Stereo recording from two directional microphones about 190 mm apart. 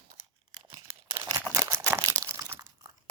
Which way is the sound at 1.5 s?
15° right (ahead or behind).